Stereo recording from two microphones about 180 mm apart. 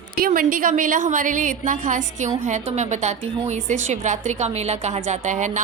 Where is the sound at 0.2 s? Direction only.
50° right (ahead or behind).